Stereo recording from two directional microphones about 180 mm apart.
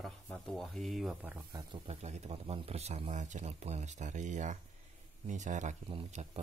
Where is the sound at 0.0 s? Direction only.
Centre (ahead or behind).